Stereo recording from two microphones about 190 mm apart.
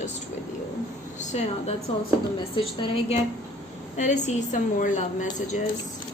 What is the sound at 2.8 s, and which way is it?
A woman's voice, 35° left (ahead or behind).